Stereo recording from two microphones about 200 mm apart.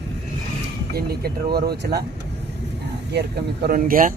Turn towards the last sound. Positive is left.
turn(degrees=-45)  # may be behind; listen again after turning